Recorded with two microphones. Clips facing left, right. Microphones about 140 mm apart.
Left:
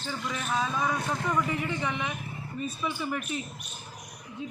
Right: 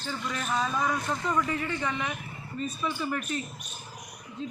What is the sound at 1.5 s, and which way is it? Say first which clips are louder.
Speech: even; 15° left (ahead or behind).